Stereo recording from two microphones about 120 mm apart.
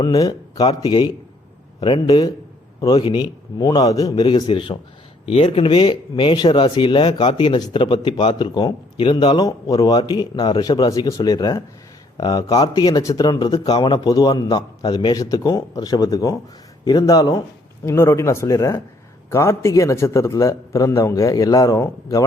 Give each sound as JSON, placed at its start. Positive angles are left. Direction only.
{"t": 0.0, "sound": "speech", "side_deg": 30}
{"t": 5.2, "sound": "speech", "side_deg": 55}
{"t": 5.8, "sound": "speech", "side_deg": 40}
{"t": 15.2, "sound": "a man's voice", "side_deg": 30}